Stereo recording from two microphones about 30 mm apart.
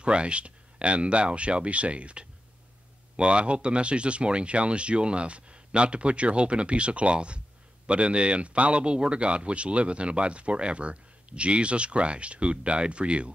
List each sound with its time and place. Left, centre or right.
0.0 s speech: right